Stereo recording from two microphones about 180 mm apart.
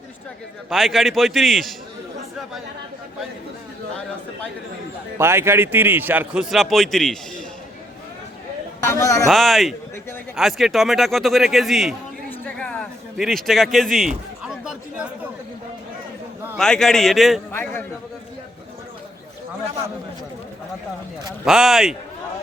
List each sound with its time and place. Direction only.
0.7 s a man's voice: centre (ahead or behind)
5.1 s a man's voice: 15° right (ahead or behind); by 7.4 s 5° left (ahead or behind)
8.8 s a man's voice: 15° left (ahead or behind)
9.2 s a man's voice: centre (ahead or behind)
12.3 s a sound: 10° left (ahead or behind)
13.1 s a man's voice: centre (ahead or behind)
14.4 s a sound: 5° right (ahead or behind)
16.6 s a man's voice: 5° left (ahead or behind)
17.5 s a man's voice: 10° left (ahead or behind)
21.4 s a man's voice: centre (ahead or behind)